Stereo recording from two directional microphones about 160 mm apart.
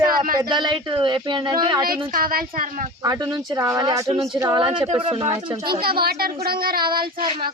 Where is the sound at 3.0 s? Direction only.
25° right (ahead or behind).